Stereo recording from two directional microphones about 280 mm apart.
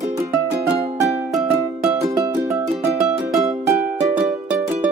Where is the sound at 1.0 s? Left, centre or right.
Centre.